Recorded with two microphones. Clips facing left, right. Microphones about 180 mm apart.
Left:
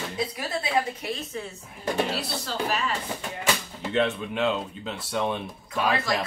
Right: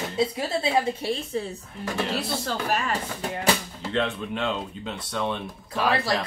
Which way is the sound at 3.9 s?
5° left (ahead or behind).